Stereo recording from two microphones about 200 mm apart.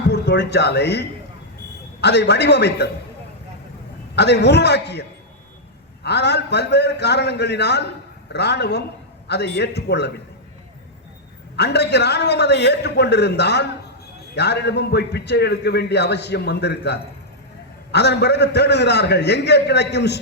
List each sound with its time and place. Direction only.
0.1 s a man's voice: 60° left (ahead or behind)
4.1 s a man's voice: 60° left (ahead or behind)
11.5 s a man's voice: 55° left (ahead or behind)